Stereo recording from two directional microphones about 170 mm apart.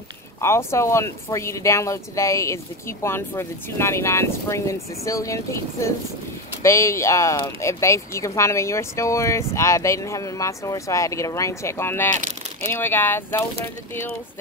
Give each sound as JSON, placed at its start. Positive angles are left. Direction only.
{"t": 0.4, "sound": "speech", "side_deg": 15}